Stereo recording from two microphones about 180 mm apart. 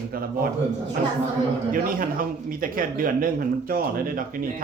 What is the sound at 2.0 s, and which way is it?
Speech, 50° right (ahead or behind).